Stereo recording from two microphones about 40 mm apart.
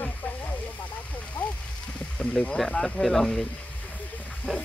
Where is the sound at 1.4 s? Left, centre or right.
Left.